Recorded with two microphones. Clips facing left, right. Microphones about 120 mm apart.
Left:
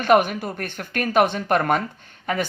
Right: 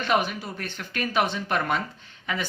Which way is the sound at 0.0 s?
50° left (ahead or behind).